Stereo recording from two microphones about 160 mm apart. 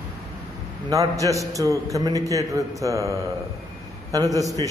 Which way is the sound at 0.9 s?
20° right (ahead or behind).